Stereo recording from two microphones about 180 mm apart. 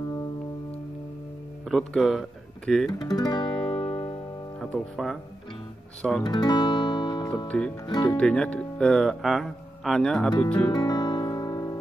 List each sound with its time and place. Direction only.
1.7 s speech: centre (ahead or behind)
2.9 s guitar: 20° left (ahead or behind)
4.6 s speech: centre (ahead or behind)
6.2 s music: 25° left (ahead or behind)
7.4 s speech: 5° left (ahead or behind)
7.8 s speech: 25° left (ahead or behind)
8.2 s speech: 5° left (ahead or behind)
10.7 s music: 20° left (ahead or behind)